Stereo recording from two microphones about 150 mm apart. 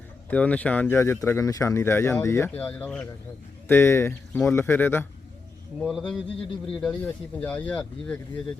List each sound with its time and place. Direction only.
0.3 s speech: 10° left (ahead or behind)
5.8 s speech: centre (ahead or behind)
6.1 s speech: 40° left (ahead or behind)
6.8 s speech: 10° left (ahead or behind)